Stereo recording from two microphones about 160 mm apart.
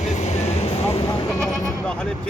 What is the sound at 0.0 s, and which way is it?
Vehicle, 45° left (ahead or behind).